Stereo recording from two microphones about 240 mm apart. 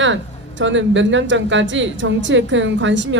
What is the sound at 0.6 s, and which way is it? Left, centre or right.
Speech, right.